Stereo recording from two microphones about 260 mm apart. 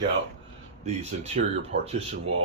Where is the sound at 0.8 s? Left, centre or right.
Right.